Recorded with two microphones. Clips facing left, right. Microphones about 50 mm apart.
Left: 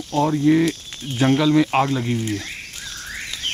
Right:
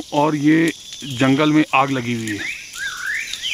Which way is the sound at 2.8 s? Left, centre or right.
Right.